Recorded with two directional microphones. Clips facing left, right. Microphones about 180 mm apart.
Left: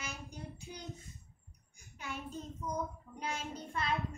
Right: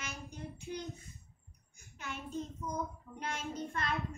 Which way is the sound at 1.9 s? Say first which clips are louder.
Right 2 dB; 10° left (ahead or behind).